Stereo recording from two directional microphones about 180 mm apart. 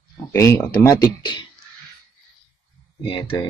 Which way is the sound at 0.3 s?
15° left (ahead or behind).